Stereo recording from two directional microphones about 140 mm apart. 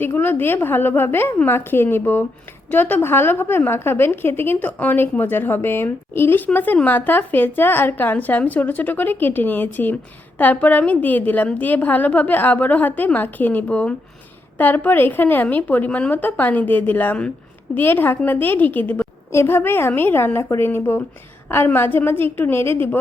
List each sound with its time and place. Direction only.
0.0 s a woman's voice: 15° left (ahead or behind)